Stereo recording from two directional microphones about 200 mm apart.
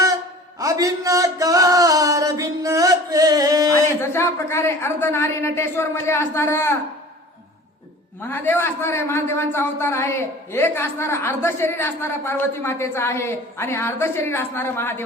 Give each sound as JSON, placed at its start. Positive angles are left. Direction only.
{"t": 0.6, "sound": "a sound", "side_deg": -15}
{"t": 3.7, "sound": "a man's voice", "side_deg": 15}
{"t": 8.3, "sound": "a man's voice", "side_deg": 10}